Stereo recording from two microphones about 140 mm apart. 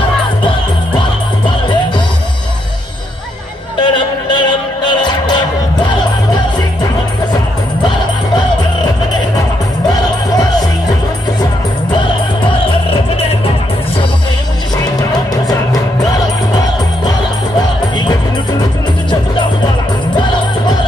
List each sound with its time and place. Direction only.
3.8 s music: 35° left (ahead or behind)
15.0 s music: 25° left (ahead or behind)